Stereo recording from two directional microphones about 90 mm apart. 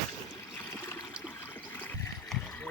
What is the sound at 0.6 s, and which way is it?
Water, 25° left (ahead or behind).